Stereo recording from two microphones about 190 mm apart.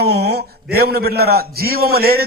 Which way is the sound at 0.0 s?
60° right (ahead or behind).